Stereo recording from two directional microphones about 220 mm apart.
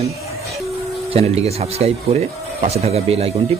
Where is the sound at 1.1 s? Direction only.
25° right (ahead or behind).